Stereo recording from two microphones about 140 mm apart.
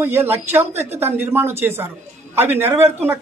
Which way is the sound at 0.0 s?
15° right (ahead or behind).